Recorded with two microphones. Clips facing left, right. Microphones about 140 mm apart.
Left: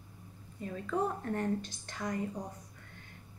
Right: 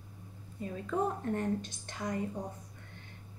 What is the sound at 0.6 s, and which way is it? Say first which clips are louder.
A woman's voice: even; 25° right (ahead or behind).